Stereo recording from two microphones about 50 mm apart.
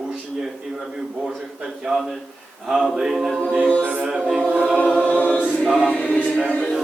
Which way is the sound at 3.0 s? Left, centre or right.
Centre.